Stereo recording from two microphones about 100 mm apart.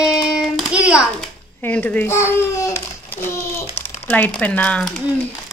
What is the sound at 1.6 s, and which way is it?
Speech, 15° left (ahead or behind).